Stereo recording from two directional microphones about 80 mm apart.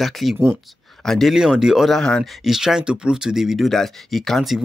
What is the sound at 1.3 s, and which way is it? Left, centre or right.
Speech, centre.